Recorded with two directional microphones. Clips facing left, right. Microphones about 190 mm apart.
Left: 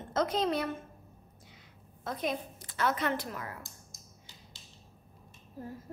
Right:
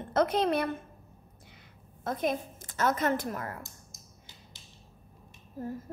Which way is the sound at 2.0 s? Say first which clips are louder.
Right 4 dB; 50° right (ahead or behind).